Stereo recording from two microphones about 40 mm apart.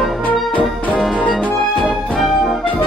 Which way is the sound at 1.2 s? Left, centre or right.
Left.